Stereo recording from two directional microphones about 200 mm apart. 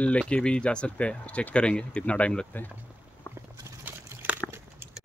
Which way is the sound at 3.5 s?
10° right (ahead or behind).